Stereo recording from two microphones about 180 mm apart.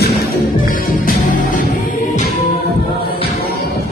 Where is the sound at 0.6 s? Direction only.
50° left (ahead or behind).